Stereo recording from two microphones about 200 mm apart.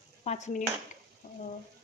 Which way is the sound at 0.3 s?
35° left (ahead or behind).